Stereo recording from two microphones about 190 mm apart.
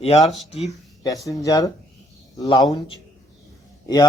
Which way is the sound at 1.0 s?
20° left (ahead or behind).